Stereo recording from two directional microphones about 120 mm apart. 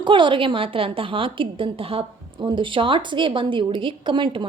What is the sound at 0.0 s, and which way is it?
A woman's voice, 40° right (ahead or behind).